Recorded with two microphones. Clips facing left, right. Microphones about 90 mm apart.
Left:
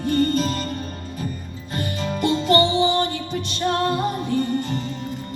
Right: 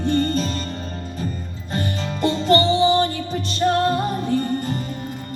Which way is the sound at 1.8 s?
35° right (ahead or behind).